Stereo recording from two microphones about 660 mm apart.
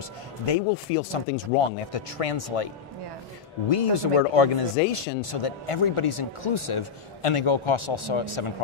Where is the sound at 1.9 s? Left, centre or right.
Left.